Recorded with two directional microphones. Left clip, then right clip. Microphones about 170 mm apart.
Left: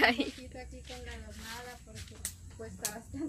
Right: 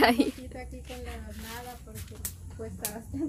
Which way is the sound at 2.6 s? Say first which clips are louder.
Right 5 dB; 35° right (ahead or behind).